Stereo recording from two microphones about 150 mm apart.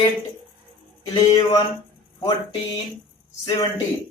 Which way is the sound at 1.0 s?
30° left (ahead or behind).